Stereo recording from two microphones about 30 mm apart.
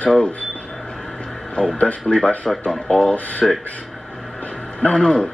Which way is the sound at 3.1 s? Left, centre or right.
Left.